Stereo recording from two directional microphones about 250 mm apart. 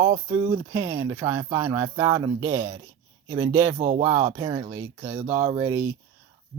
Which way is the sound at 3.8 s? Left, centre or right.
Right.